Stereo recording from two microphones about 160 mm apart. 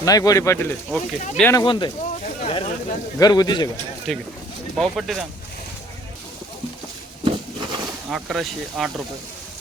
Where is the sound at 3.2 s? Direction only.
25° left (ahead or behind).